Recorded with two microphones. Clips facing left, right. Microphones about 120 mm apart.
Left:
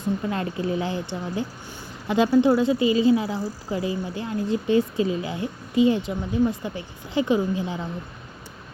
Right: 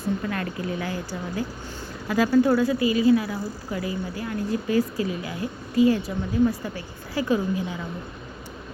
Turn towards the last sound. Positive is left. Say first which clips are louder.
# left 1 dB
turn(degrees=25)  # may be behind; listen again after turning